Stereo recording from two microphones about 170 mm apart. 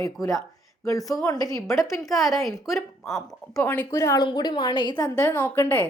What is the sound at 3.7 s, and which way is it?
A woman's voice, 15° left (ahead or behind).